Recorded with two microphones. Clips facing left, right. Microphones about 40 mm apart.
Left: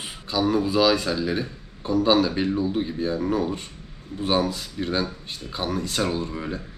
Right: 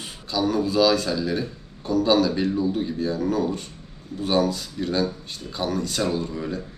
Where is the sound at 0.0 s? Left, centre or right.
Centre.